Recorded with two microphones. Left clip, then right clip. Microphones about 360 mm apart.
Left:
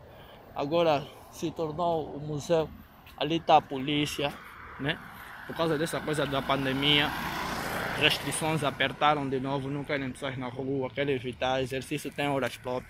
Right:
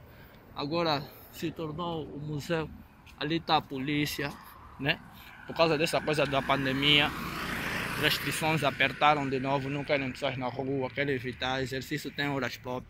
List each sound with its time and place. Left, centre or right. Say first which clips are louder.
0.6 s speech: left 4 dB; centre
5.5 s speech: right 3 dB; centre
7.3 s vehicle: left 1 dB; left
8.0 s speech: left 2 dB; centre